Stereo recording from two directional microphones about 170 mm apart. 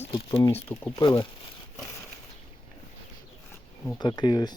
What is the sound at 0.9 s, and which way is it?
Speech, 25° left (ahead or behind).